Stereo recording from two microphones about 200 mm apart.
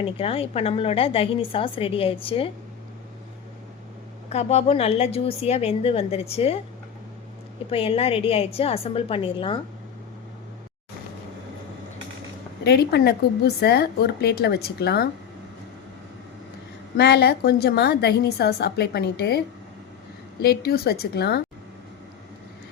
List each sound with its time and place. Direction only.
0.0 s a woman's voice: 30° left (ahead or behind)
4.3 s a woman's voice: 30° left (ahead or behind)
7.7 s a woman's voice: 30° left (ahead or behind)
12.6 s a woman's voice: 55° left (ahead or behind)
17.0 s a woman's voice: 55° left (ahead or behind)
20.4 s a woman's voice: 55° left (ahead or behind)